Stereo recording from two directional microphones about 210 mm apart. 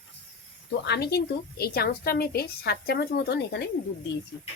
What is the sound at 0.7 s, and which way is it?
A woman's voice, 55° left (ahead or behind).